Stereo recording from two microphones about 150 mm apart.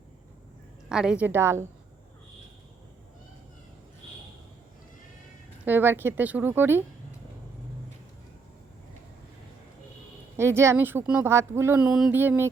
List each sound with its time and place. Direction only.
0.9 s speech: 5° right (ahead or behind)
5.6 s speech: 15° right (ahead or behind)
10.3 s speech: 15° right (ahead or behind)